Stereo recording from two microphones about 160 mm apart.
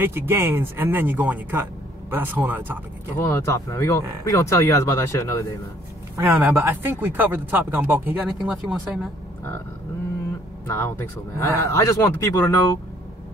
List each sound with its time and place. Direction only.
0.0 s speech: 15° right (ahead or behind)
3.3 s speech: 15° left (ahead or behind)
6.1 s speech: 15° right (ahead or behind)
10.7 s speech: 15° left (ahead or behind)